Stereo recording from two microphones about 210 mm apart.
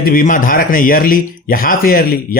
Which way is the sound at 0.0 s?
40° left (ahead or behind).